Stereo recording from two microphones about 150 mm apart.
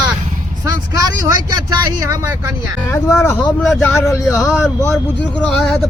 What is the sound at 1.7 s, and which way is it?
Speech, 20° right (ahead or behind).